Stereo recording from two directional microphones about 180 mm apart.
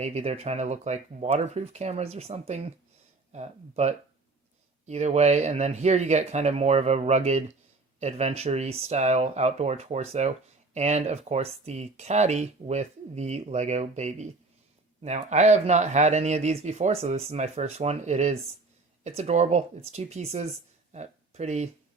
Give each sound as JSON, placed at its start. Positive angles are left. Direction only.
{"t": 0.0, "sound": "speech", "side_deg": -35}